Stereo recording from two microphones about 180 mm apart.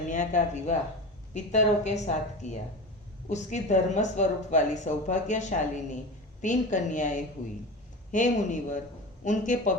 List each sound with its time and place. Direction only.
0.1 s a woman's voice: 45° left (ahead or behind)